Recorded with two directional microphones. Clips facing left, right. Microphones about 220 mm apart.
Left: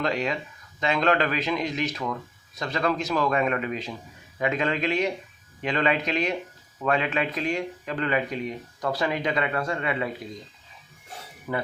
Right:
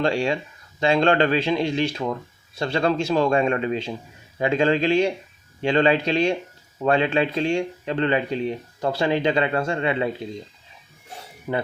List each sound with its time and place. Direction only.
0.0 s speech: 30° right (ahead or behind)
11.5 s speech: 20° right (ahead or behind)